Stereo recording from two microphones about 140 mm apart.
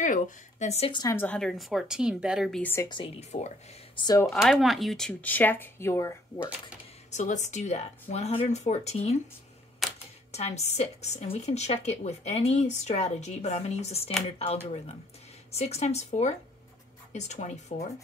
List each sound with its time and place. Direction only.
0.0 s speech: 60° left (ahead or behind)
1.1 s a woman's voice: 10° left (ahead or behind)
2.6 s speech: 15° left (ahead or behind)
2.9 s speech: 35° left (ahead or behind)
3.2 s speech: 55° left (ahead or behind)
3.9 s speech: 30° left (ahead or behind)
4.3 s speech: centre (ahead or behind); by 6.5 s 20° left (ahead or behind)
7.1 s speech: 60° left (ahead or behind)
9.8 s camera: centre (ahead or behind)
10.3 s speech: 50° left (ahead or behind)